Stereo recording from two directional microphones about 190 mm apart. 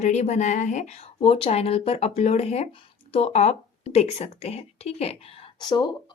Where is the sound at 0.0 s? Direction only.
35° left (ahead or behind).